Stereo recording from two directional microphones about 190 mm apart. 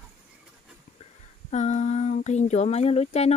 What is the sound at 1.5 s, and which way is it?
Speech, 40° left (ahead or behind).